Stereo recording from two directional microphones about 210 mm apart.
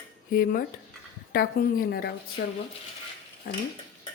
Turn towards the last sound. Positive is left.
turn(degrees=45)  # may be behind; listen again after turning